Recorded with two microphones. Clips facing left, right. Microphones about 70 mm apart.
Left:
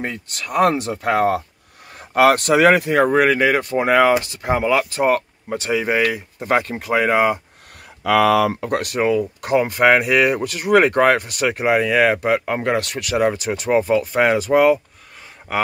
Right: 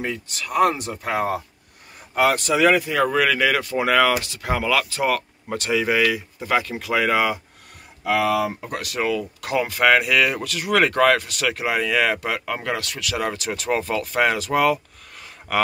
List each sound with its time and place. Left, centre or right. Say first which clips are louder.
0.0 s speech: left 1 dB; left
0.7 s speech: left 6 dB; left
2.9 s speech: left 5 dB; left
8.5 s speech: left 7 dB; left
8.9 s speech: left 3 dB; left
13.5 s speech: left 6 dB; centre